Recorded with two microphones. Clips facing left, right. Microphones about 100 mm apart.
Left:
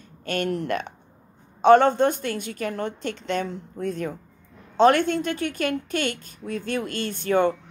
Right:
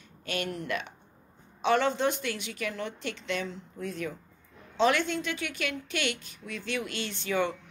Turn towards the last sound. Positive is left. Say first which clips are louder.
# left 8 dB
turn(degrees=50)  # may be behind; listen again after turning